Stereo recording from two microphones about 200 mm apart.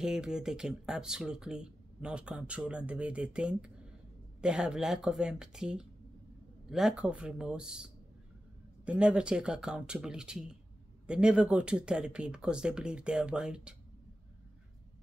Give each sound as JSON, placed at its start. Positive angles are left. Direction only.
{"t": 0.0, "sound": "speech", "side_deg": -5}